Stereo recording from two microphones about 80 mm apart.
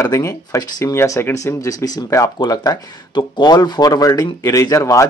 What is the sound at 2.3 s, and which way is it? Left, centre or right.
Speech, left.